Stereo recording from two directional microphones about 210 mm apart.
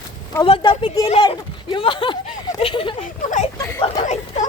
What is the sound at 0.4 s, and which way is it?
Speech, 25° left (ahead or behind).